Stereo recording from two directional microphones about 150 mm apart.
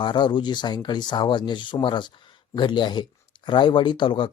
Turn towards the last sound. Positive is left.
turn(degrees=35)  # may be behind; listen again after turning